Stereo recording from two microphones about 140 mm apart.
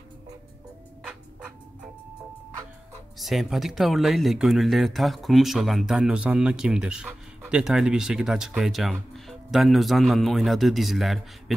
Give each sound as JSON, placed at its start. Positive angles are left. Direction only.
{"t": 3.2, "sound": "speech", "side_deg": 0}